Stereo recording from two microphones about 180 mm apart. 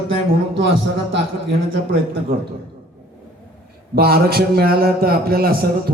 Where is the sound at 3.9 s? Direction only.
60° right (ahead or behind).